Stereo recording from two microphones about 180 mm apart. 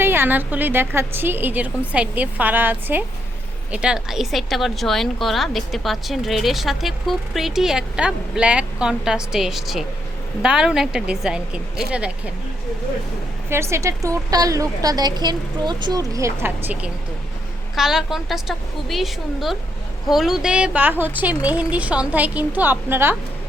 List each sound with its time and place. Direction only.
0.0 s a woman's voice: 10° right (ahead or behind)
13.5 s a woman's voice: 15° right (ahead or behind)